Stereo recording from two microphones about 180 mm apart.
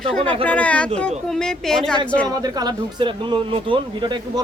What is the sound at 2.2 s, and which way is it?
Speech, 20° right (ahead or behind).